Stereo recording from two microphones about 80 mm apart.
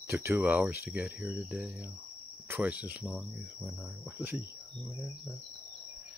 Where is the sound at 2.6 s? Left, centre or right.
Centre.